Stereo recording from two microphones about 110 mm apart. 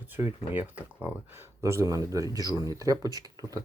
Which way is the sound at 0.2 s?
30° right (ahead or behind).